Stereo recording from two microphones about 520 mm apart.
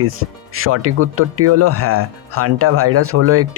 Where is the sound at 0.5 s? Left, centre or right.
Right.